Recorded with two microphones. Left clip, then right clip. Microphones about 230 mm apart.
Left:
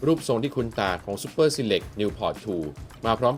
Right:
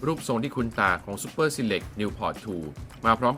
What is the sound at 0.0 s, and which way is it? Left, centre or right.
Speech, centre.